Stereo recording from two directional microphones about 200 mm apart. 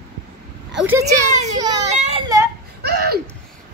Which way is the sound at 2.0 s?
30° right (ahead or behind).